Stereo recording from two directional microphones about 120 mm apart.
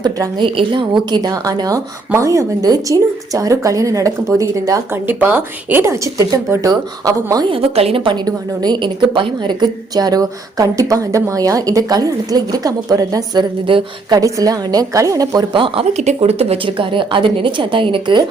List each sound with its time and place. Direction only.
0.0 s a woman's voice: 40° right (ahead or behind)
5.0 s speech: 15° right (ahead or behind)
7.5 s a woman's voice: 55° right (ahead or behind); by 13.4 s 30° right (ahead or behind)
13.7 s speech: 45° right (ahead or behind)
14.2 s speech: 30° right (ahead or behind)
15.5 s speech: 50° right (ahead or behind)